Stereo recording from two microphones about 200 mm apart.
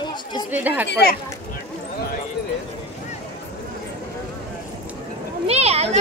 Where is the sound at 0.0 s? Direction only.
20° left (ahead or behind).